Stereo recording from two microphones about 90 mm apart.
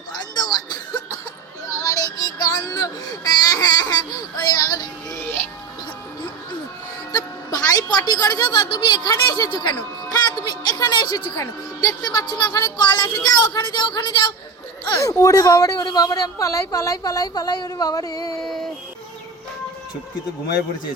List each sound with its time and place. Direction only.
0.1 s music: 50° left (ahead or behind)
1.8 s music: 40° left (ahead or behind)
7.1 s a sound: 45° left (ahead or behind)
8.7 s speech: 85° left
9.0 s a woman's voice: 45° left (ahead or behind)
10.1 s a sound: 45° left (ahead or behind)
11.3 s a woman's voice: 45° left (ahead or behind)
14.8 s a woman's voice: 40° left (ahead or behind)